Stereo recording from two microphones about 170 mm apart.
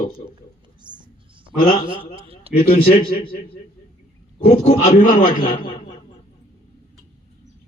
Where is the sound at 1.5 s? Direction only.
60° left (ahead or behind).